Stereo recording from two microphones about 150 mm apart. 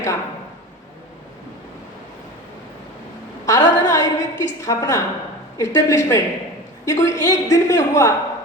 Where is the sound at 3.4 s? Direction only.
25° left (ahead or behind).